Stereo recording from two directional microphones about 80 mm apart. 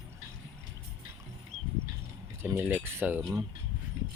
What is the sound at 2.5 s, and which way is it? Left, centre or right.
Speech, right.